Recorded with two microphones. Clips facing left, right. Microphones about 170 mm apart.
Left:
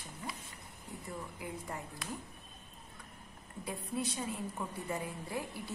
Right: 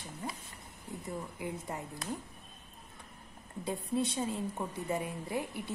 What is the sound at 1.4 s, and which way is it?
Speech, 20° right (ahead or behind).